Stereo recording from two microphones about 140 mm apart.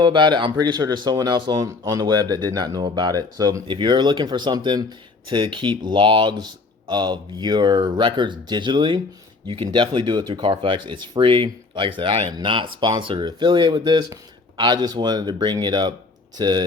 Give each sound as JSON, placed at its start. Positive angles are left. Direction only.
{"t": 0.0, "sound": "speech", "side_deg": -35}